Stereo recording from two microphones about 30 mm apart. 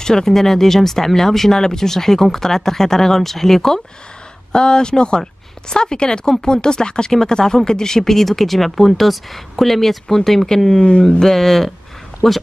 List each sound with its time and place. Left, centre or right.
0.0 s speech: centre
4.5 s speech: left
8.1 s speech: centre
10.8 s speech: left
11.1 s speech: centre